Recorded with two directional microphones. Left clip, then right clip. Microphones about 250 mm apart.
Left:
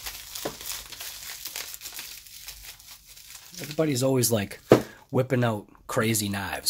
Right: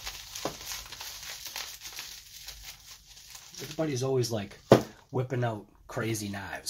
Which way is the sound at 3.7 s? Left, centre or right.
Left.